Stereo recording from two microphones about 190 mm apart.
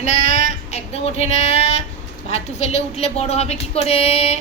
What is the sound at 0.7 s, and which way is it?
A woman's voice, 35° left (ahead or behind).